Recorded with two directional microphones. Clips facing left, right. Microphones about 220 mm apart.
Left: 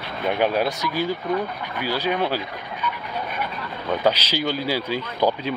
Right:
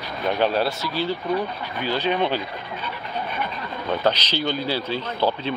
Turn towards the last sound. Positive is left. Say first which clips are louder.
# left 1 dB
turn(degrees=10)  # may be behind; listen again after turning